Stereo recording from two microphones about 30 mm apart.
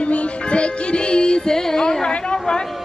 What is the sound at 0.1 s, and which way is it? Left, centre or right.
Music, left.